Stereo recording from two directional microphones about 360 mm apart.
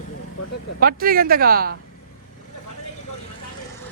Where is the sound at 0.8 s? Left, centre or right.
Right.